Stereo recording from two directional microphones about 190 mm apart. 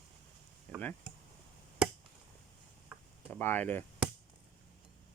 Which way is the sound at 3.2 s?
10° left (ahead or behind).